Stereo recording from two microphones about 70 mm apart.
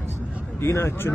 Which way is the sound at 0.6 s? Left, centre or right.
Left.